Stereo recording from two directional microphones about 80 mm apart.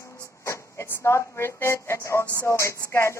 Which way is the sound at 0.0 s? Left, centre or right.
Left.